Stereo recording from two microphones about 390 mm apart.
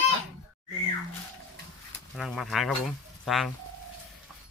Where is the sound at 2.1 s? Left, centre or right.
Centre.